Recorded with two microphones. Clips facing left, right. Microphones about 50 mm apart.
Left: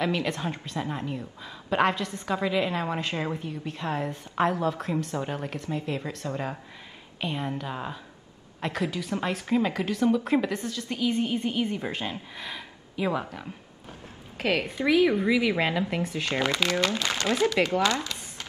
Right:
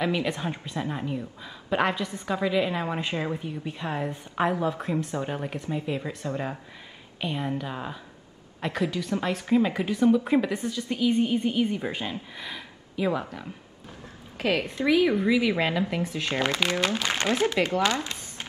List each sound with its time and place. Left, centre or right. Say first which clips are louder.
0.0 s a woman's voice: right 1 dB; centre
0.9 s a woman's voice: right 2 dB; centre
2.3 s a woman's voice: right 1 dB; centre
3.0 s a woman's voice: right 1 dB; centre
9.8 s a woman's voice: right 1 dB; centre
10.1 s a woman's voice: right 2 dB; centre
10.6 s a woman's voice: right 3 dB; centre
11.0 s a woman's voice: right 3 dB; centre
16.4 s a woman's voice: even; centre
17.8 s a sound: even; right